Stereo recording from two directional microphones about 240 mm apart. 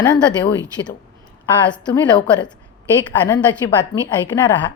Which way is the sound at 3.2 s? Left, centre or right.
Centre.